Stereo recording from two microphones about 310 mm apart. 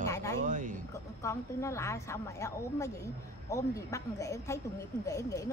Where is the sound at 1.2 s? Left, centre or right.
Centre.